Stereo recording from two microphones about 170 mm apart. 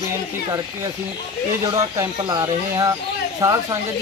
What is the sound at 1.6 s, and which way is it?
Speech, 20° right (ahead or behind).